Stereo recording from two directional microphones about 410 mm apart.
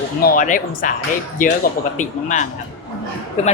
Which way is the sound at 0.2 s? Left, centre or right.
Left.